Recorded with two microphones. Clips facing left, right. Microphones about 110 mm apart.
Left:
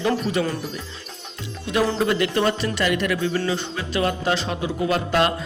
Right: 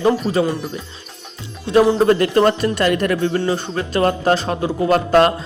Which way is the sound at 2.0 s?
40° right (ahead or behind).